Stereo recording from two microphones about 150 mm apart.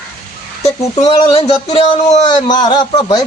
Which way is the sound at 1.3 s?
35° left (ahead or behind).